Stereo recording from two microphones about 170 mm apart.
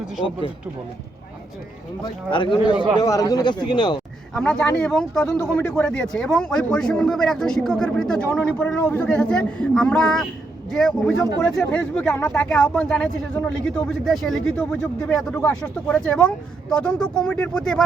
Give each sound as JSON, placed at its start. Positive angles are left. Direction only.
{"t": 2.3, "sound": "speech", "side_deg": 25}
{"t": 4.4, "sound": "speech", "side_deg": 5}
{"t": 5.2, "sound": "speech", "side_deg": 15}